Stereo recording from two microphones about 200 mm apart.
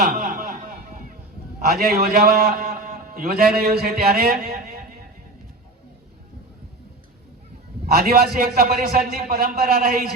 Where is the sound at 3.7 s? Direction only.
50° right (ahead or behind).